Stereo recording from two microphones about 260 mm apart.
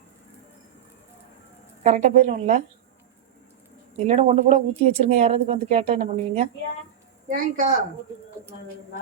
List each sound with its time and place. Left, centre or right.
1.8 s speech: right
3.9 s a woman's voice: right